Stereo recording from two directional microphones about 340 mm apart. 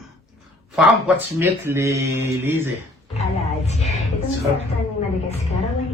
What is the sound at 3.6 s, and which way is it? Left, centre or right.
Speech, centre.